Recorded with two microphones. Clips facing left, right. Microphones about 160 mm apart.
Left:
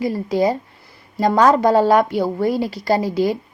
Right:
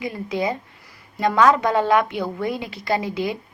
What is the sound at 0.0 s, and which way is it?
Speech, 40° left (ahead or behind).